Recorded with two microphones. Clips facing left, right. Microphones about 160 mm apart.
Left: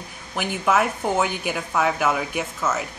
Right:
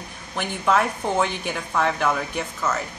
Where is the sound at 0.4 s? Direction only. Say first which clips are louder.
Even; 5° left (ahead or behind).